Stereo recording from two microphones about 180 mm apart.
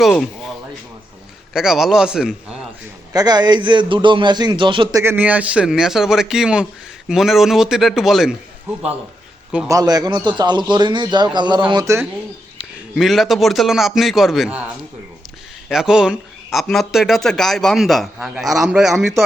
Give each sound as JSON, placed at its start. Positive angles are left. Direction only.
{"t": 0.1, "sound": "a sound", "side_deg": 0}
{"t": 1.5, "sound": "speech", "side_deg": -5}
{"t": 3.1, "sound": "a man's voice", "side_deg": -20}
{"t": 9.6, "sound": "a man's voice", "side_deg": -20}
{"t": 12.5, "sound": "a man's voice", "side_deg": 0}
{"t": 15.7, "sound": "speech", "side_deg": -5}